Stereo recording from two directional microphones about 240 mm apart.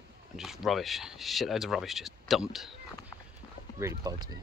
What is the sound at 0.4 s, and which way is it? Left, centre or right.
Speech, centre.